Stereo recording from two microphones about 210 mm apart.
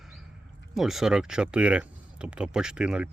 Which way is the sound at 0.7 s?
Centre (ahead or behind).